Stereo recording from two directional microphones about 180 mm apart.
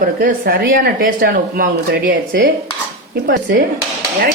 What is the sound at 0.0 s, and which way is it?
Speech, 55° right (ahead or behind).